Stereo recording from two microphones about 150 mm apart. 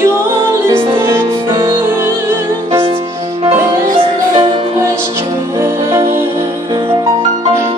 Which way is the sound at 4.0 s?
35° right (ahead or behind).